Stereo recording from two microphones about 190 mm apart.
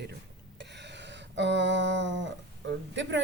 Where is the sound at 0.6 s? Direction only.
65° right (ahead or behind).